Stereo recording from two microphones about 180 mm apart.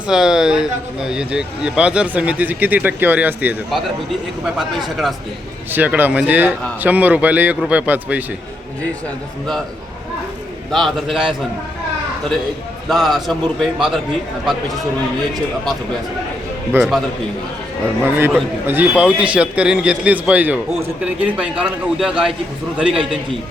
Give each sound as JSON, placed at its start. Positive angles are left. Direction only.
{"t": 0.1, "sound": "a man's voice", "side_deg": -5}
{"t": 10.7, "sound": "speech", "side_deg": 0}
{"t": 12.9, "sound": "speech", "side_deg": 0}
{"t": 16.7, "sound": "speech", "side_deg": -5}
{"t": 18.0, "sound": "a man's voice", "side_deg": -10}